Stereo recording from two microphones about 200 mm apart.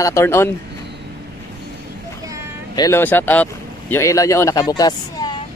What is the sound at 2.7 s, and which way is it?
Speech, 15° left (ahead or behind).